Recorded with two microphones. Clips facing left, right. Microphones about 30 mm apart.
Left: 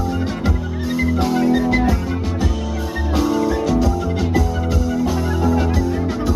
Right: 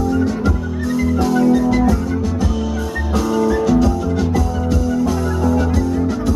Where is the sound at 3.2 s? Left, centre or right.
Centre.